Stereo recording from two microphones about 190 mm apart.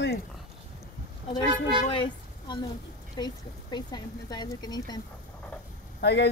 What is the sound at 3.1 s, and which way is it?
A woman's voice, 20° left (ahead or behind).